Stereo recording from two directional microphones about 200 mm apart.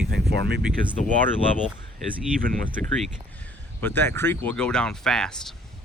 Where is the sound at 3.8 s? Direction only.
10° left (ahead or behind).